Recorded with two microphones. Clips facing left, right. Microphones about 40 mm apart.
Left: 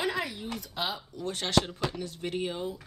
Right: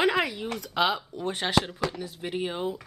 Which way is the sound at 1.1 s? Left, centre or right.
Right.